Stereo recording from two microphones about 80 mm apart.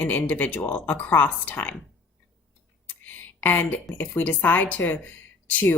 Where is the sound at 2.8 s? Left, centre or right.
Left.